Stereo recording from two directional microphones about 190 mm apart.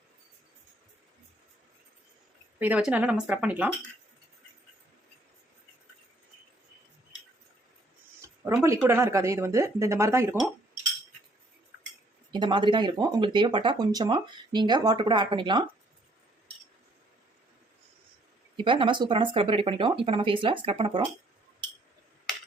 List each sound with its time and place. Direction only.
2.6 s speech: 10° right (ahead or behind)
8.4 s speech: 15° right (ahead or behind)
12.3 s speech: 25° right (ahead or behind)
18.5 s speech: 25° right (ahead or behind)